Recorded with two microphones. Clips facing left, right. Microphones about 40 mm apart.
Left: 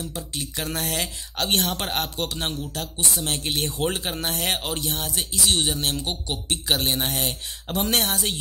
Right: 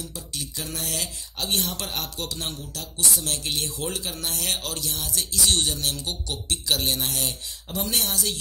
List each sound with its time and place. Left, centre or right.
0.0 s speech: left
0.6 s speech: left
4.6 s speech: left
4.9 s speech: left
5.4 s speech: centre
5.8 s speech: left
7.1 s speech: left